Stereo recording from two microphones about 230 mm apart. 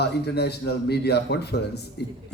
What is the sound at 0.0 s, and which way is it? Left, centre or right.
A man's voice, left.